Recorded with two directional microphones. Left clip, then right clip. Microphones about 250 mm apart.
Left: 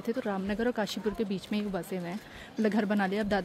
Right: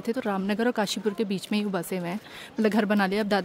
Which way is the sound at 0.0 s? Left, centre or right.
Right.